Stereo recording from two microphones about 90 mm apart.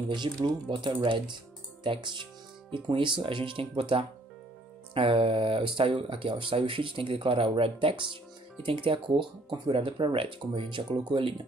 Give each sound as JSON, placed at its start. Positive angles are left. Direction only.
{"t": 0.1, "sound": "speech", "side_deg": -55}
{"t": 8.6, "sound": "speech", "side_deg": -80}